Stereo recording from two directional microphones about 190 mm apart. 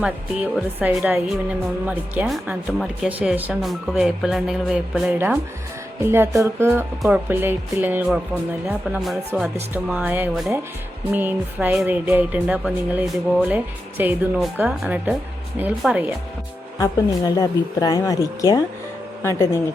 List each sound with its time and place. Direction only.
0.0 s speech: 5° right (ahead or behind)
6.0 s music: 15° right (ahead or behind)
8.6 s speech: centre (ahead or behind)
9.6 s music: 10° right (ahead or behind)
16.8 s speech: 20° left (ahead or behind)